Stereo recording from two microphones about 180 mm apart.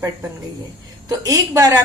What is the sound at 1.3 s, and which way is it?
Speech, 20° right (ahead or behind).